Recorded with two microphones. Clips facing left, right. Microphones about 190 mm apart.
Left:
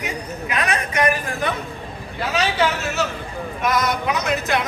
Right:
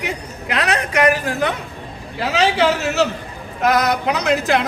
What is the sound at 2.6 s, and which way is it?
Speech, 75° right (ahead or behind).